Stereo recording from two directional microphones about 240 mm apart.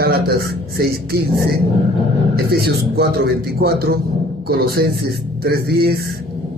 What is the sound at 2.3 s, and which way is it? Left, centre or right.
Speech, right.